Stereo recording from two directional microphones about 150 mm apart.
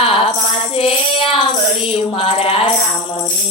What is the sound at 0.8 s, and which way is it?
Child singing, 40° left (ahead or behind).